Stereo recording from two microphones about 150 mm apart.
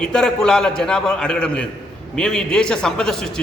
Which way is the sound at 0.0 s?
5° left (ahead or behind).